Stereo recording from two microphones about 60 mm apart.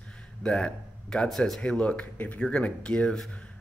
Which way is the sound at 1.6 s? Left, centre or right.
Left.